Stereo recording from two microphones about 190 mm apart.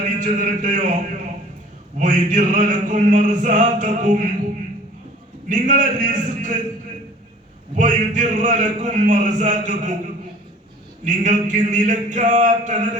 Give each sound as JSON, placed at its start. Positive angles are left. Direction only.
{"t": 0.2, "sound": "a man's voice", "side_deg": -40}
{"t": 2.0, "sound": "male singing", "side_deg": -45}
{"t": 5.5, "sound": "a man's voice", "side_deg": -40}
{"t": 7.8, "sound": "a man's voice", "side_deg": -40}
{"t": 11.0, "sound": "a man's voice", "side_deg": -40}